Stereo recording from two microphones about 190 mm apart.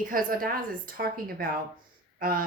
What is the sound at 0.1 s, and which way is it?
Speech, 45° right (ahead or behind).